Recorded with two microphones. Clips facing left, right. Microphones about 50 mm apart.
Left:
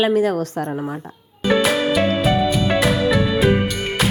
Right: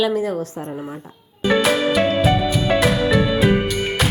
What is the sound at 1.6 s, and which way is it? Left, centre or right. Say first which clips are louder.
Music: right 1 dB; centre.